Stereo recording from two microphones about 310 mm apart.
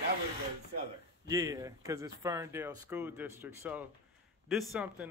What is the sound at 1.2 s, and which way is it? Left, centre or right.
Speech, centre.